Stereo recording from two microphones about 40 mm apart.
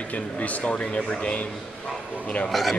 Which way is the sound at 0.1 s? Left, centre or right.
Left.